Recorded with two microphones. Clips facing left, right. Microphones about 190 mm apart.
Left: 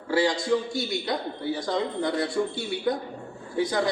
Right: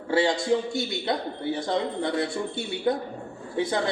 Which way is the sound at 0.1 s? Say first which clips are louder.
Right 1 dB; 25° right (ahead or behind).